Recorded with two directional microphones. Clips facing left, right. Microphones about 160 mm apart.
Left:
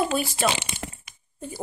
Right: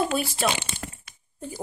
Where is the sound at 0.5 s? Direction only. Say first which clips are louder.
Left 1 dB; 20° left (ahead or behind).